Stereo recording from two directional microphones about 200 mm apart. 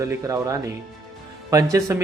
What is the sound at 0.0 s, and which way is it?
A man's voice, 15° right (ahead or behind).